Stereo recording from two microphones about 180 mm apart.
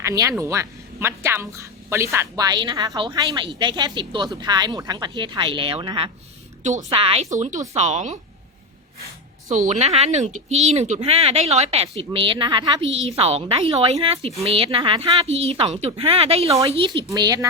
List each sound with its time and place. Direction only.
0.0 s a woman's voice: 15° right (ahead or behind)
6.6 s speech: 40° right (ahead or behind)
7.3 s speech: 45° right (ahead or behind)
9.5 s speech: 40° right (ahead or behind); by 17.5 s 20° right (ahead or behind)